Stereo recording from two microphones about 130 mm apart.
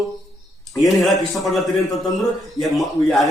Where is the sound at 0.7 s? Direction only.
Centre (ahead or behind).